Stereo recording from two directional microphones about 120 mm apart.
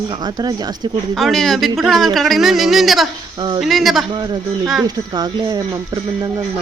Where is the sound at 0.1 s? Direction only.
35° right (ahead or behind).